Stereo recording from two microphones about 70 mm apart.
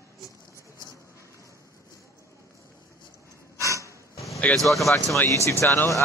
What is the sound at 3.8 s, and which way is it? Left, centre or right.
Dog, left.